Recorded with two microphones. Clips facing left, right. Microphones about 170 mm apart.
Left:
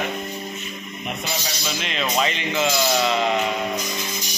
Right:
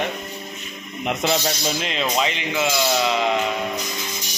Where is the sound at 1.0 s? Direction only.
90° right.